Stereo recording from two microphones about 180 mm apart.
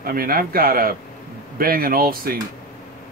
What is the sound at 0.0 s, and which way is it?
Speech, 55° right (ahead or behind).